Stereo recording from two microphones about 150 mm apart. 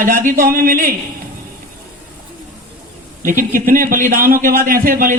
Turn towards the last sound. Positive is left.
turn(degrees=-70)  # may be behind; listen again after turning